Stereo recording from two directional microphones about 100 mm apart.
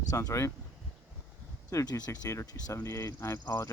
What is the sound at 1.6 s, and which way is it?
Speech, 35° left (ahead or behind).